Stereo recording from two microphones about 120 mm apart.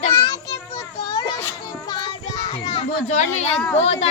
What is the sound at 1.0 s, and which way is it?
Children playing, 30° left (ahead or behind).